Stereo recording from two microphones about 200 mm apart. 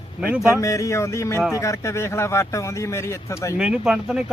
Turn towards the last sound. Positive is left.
turn(degrees=-5)  # may be behind; listen again after turning